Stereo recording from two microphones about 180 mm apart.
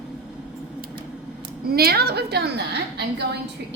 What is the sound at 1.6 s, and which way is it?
A woman's voice, 60° right (ahead or behind).